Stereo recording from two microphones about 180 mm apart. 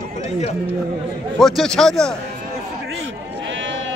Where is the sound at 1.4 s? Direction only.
Centre (ahead or behind).